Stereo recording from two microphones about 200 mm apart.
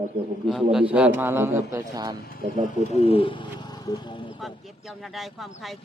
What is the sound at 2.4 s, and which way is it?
Speech, 45° right (ahead or behind).